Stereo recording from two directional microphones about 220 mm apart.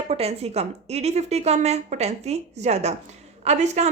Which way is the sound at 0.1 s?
30° right (ahead or behind).